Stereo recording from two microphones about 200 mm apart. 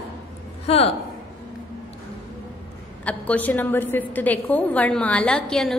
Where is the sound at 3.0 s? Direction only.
5° left (ahead or behind).